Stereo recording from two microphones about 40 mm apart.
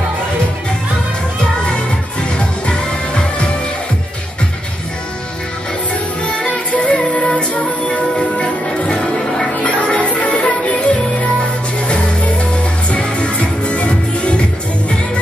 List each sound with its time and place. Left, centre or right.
2.6 s music: left
6.7 s music: left
8.4 s music: left